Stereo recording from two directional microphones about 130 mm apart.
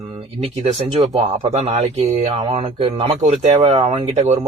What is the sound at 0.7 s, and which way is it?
Speech, 50° right (ahead or behind).